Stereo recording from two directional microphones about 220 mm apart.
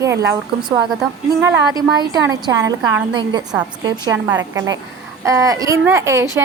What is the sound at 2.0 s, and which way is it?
A woman's voice, 15° right (ahead or behind).